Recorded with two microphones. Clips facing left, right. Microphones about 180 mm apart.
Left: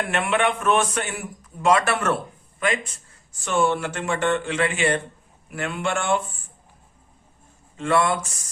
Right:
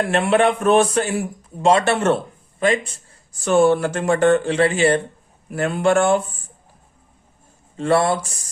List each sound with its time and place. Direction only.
0.0 s a man's voice: 35° right (ahead or behind)
7.8 s a man's voice: 35° right (ahead or behind)